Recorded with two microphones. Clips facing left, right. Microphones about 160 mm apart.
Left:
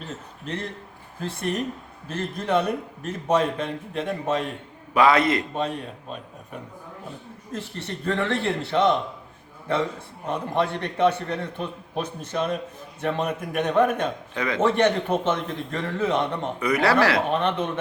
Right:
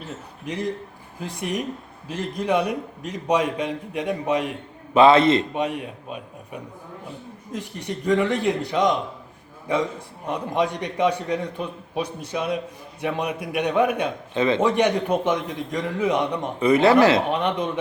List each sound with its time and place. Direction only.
0.4 s a man's voice: 15° right (ahead or behind)
4.9 s speech: 25° right (ahead or behind)
5.6 s a man's voice: 10° right (ahead or behind)
14.3 s speech: 25° right (ahead or behind)
14.6 s a man's voice: 15° right (ahead or behind)
16.6 s speech: 25° right (ahead or behind)